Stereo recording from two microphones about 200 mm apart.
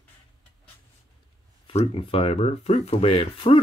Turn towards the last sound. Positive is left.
turn(degrees=25)  # may be behind; listen again after turning